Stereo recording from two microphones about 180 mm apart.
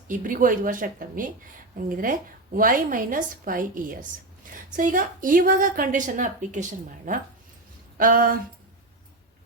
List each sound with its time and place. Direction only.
0.1 s a woman's voice: 50° right (ahead or behind)